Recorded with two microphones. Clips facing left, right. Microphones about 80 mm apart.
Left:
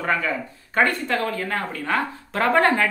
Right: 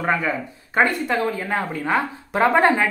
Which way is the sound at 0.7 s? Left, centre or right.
Centre.